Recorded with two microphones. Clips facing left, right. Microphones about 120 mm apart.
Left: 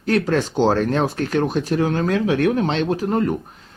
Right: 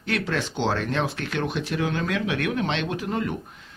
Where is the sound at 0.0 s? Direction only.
40° left (ahead or behind).